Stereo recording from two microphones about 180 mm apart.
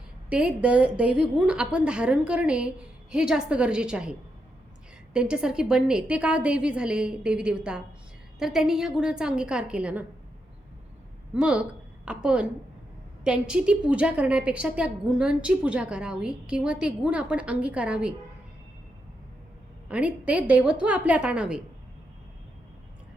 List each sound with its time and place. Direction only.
0.3 s a woman's voice: 5° right (ahead or behind)
11.3 s a woman's voice: 5° right (ahead or behind)
19.9 s a woman's voice: 5° right (ahead or behind)